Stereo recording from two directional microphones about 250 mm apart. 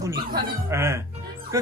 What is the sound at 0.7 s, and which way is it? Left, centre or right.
Speech, centre.